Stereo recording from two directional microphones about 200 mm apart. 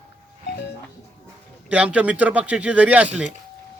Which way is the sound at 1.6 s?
5° right (ahead or behind).